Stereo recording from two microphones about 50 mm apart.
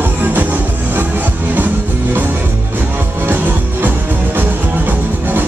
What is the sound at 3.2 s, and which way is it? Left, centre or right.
Music, right.